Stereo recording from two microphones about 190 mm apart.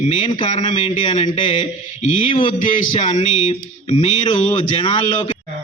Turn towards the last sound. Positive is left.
turn(degrees=25)  # may be behind; listen again after turning